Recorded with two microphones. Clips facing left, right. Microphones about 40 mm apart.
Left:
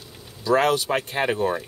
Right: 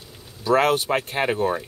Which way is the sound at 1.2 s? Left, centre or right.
Centre.